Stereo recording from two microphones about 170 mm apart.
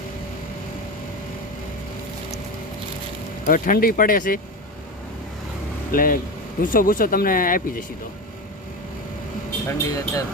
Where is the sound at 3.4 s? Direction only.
55° left (ahead or behind).